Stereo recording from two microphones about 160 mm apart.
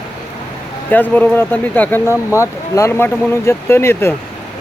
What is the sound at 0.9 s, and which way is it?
Speech, 10° left (ahead or behind).